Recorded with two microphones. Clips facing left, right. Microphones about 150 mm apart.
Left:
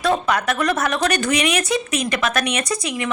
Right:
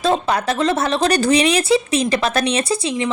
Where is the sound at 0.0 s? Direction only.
30° right (ahead or behind).